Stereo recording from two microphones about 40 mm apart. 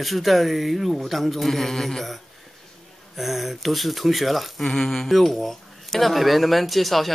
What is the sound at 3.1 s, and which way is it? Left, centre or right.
Speech, centre.